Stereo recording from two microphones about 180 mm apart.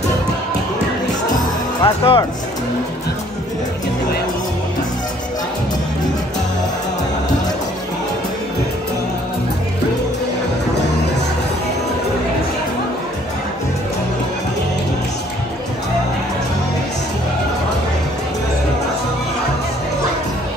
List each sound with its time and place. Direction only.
1.8 s speech: 30° left (ahead or behind)